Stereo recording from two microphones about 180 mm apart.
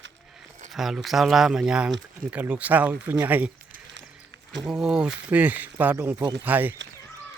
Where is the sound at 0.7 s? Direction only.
Centre (ahead or behind).